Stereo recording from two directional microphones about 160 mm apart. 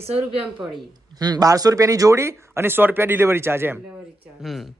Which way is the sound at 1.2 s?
25° right (ahead or behind).